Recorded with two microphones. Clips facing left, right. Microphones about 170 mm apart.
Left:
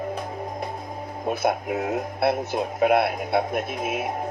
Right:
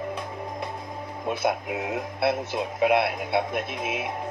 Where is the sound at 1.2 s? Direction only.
45° left (ahead or behind).